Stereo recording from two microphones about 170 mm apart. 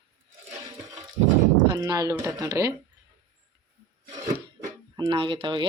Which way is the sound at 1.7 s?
20° right (ahead or behind).